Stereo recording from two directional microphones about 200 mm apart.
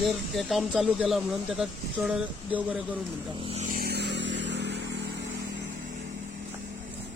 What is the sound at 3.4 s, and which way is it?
Vehicle, 35° right (ahead or behind).